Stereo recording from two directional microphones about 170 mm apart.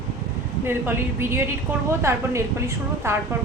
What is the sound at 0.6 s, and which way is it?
A woman's voice, 15° right (ahead or behind).